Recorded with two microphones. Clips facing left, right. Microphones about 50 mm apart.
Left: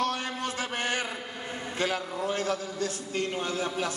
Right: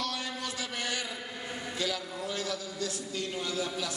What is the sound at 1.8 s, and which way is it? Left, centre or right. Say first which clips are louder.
A man's voice: left 6 dB; left.